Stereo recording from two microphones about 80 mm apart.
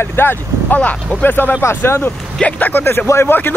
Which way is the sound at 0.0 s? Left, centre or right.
Left.